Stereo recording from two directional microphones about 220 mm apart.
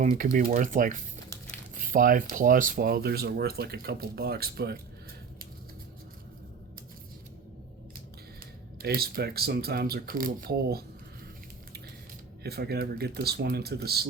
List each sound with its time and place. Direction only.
0.0 s speech: 35° right (ahead or behind)
8.8 s speech: 45° right (ahead or behind)
12.4 s speech: 45° right (ahead or behind)